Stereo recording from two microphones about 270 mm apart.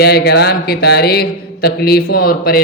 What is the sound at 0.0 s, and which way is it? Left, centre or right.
Speech, left.